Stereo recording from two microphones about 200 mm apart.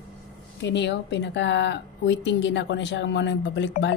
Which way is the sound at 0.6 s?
60° left (ahead or behind).